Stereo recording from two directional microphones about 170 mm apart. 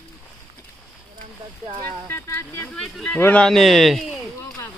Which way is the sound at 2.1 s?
15° left (ahead or behind).